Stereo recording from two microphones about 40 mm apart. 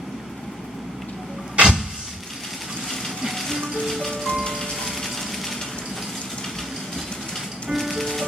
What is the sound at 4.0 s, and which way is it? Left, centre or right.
Music, centre.